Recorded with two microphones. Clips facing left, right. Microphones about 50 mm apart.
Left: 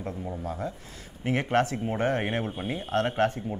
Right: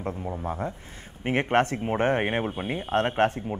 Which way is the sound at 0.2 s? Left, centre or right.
Right.